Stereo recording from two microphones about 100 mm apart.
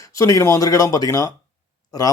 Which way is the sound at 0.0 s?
35° left (ahead or behind).